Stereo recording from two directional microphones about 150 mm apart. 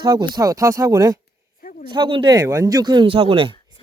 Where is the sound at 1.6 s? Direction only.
65° left (ahead or behind).